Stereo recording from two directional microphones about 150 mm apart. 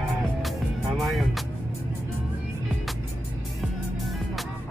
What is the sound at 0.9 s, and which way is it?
Speech, centre (ahead or behind).